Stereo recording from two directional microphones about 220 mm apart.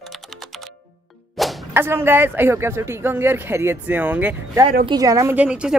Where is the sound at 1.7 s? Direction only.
10° right (ahead or behind).